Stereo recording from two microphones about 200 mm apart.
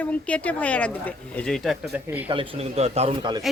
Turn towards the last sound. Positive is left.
turn(degrees=-20)  # may be behind; listen again after turning